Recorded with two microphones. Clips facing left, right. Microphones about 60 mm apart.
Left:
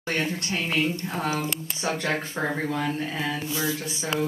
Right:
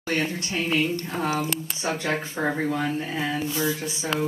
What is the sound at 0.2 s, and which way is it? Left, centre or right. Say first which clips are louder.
Speech: right 1 dB; right.